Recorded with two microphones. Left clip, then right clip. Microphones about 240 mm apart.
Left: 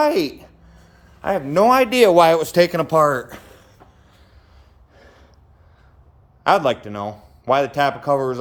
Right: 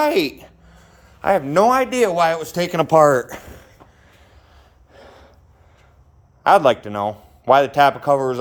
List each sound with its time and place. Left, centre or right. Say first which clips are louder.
0.0 s a sound: even; centre
1.7 s speech: left 4 dB; centre
2.7 s speech: right 3 dB; centre
4.9 s gasp: right 5 dB; centre
6.4 s a man's voice: right 3 dB; centre